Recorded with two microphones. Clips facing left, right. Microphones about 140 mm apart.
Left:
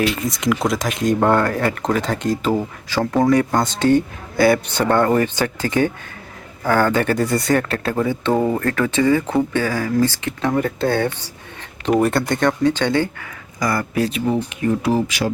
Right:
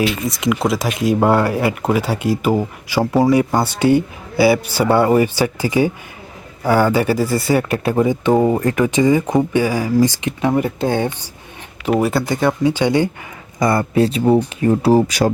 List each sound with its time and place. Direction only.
0.0 s speech: 5° right (ahead or behind)
11.9 s speech: 5° right (ahead or behind)
13.6 s speech: 25° right (ahead or behind)